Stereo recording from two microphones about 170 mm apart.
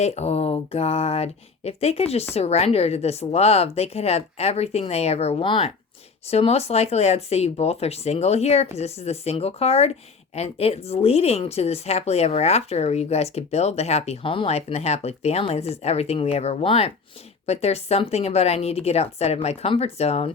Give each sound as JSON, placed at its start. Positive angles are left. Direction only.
{"t": 0.0, "sound": "speech", "side_deg": 40}